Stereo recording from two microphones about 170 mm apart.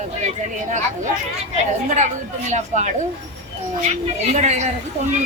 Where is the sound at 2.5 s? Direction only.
45° right (ahead or behind).